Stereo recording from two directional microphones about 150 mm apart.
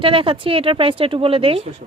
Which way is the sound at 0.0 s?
35° right (ahead or behind).